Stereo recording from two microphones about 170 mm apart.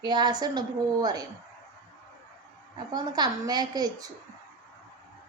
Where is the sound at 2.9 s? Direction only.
25° right (ahead or behind).